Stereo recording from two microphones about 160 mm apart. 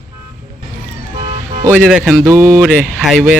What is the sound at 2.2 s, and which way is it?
Mantra, 20° right (ahead or behind).